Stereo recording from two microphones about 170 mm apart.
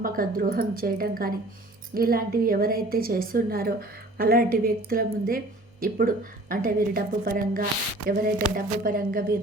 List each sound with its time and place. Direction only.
0.0 s a woman's voice: 55° right (ahead or behind)